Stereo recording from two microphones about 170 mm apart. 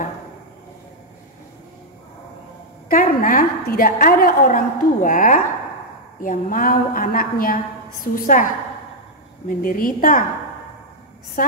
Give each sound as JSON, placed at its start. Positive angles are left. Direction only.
{"t": 2.9, "sound": "a woman's voice", "side_deg": 55}
{"t": 9.5, "sound": "a woman's voice", "side_deg": 55}
{"t": 11.4, "sound": "a woman's voice", "side_deg": 55}